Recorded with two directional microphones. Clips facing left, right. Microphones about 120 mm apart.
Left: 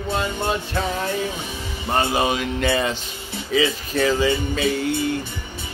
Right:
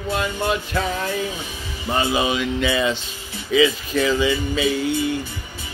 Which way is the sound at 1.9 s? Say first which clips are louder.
Even; 45° left (ahead or behind).